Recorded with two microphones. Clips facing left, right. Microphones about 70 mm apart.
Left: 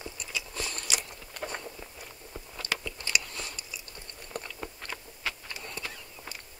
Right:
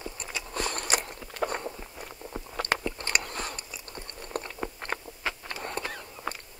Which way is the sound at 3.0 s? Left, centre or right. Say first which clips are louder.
Right 2 dB; right.